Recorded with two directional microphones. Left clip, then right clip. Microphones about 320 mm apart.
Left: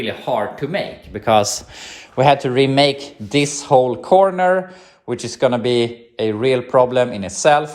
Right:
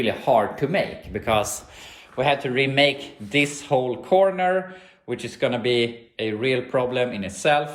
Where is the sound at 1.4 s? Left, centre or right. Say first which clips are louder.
Left 7 dB; left.